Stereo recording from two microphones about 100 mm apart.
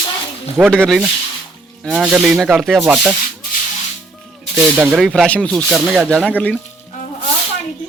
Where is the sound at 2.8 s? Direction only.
15° right (ahead or behind).